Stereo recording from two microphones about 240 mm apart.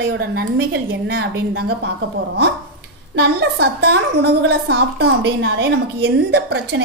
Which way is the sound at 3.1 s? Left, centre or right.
Right.